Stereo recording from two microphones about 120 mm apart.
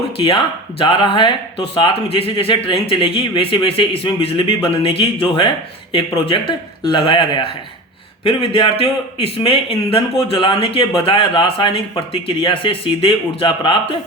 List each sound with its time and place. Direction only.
0.2 s speech: 50° left (ahead or behind)